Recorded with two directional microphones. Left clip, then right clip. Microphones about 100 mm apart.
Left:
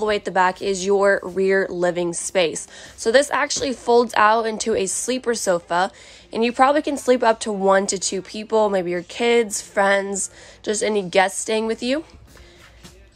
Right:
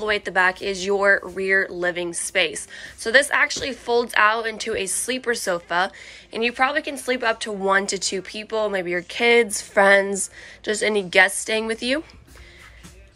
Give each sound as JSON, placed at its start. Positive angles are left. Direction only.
{"t": 0.0, "sound": "a woman's voice", "side_deg": 50}
{"t": 6.4, "sound": "speech", "side_deg": 70}
{"t": 7.6, "sound": "a woman's voice", "side_deg": 45}
{"t": 8.8, "sound": "a woman's voice", "side_deg": 35}